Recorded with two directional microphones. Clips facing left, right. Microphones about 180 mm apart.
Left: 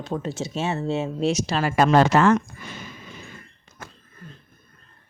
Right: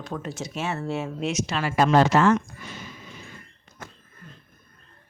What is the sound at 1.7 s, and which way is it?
Speech, 55° left (ahead or behind).